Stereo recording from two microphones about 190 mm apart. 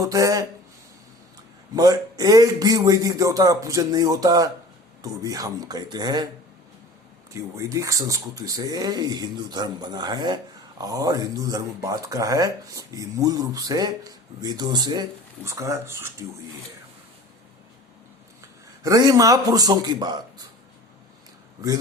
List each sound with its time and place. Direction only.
0.0 s speech: 15° right (ahead or behind)
1.7 s speech: 20° right (ahead or behind)
7.5 s speech: 15° right (ahead or behind)
18.8 s speech: 20° right (ahead or behind)